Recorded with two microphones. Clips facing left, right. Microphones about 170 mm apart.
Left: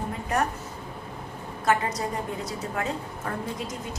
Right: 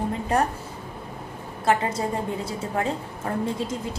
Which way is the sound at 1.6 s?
25° right (ahead or behind).